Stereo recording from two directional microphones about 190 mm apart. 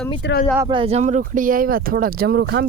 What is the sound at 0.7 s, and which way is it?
Speech, 30° right (ahead or behind).